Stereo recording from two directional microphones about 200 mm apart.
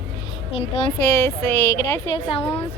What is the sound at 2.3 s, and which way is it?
Speech, 30° left (ahead or behind).